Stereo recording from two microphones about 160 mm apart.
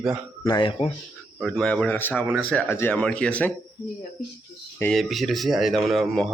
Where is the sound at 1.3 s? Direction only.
5° left (ahead or behind).